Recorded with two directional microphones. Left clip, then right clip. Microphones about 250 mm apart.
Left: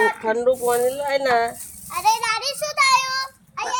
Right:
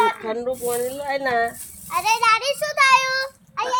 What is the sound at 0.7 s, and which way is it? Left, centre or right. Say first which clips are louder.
Speech: left 4 dB; centre.